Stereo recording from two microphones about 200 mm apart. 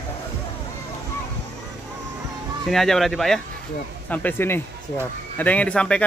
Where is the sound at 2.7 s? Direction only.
Centre (ahead or behind).